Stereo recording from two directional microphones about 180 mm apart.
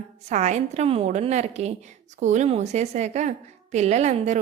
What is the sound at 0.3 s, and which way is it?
A woman's voice, 40° right (ahead or behind).